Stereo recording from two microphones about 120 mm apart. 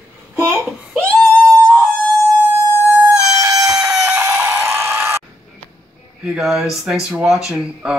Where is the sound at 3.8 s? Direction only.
20° right (ahead or behind).